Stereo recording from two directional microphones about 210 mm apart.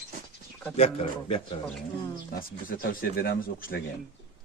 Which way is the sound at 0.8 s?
30° left (ahead or behind).